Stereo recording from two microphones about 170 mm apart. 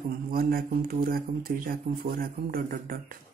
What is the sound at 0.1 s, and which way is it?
Speech, 60° right (ahead or behind).